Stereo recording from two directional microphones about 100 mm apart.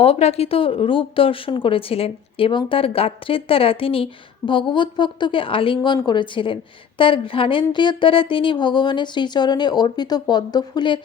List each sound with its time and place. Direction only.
0.0 s speech: 85° left
2.5 s speech: 55° left (ahead or behind)